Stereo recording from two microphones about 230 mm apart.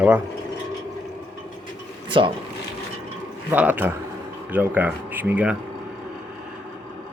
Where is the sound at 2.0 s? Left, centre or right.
Right.